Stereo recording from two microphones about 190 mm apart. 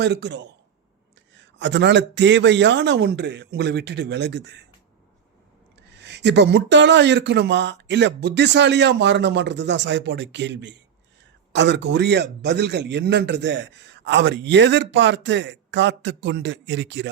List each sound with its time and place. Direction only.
0.0 s a man's voice: 65° right (ahead or behind)
5.9 s a man's voice: 65° right (ahead or behind)